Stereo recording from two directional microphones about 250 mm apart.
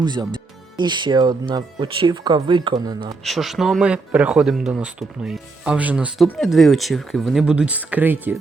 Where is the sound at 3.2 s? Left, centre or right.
Centre.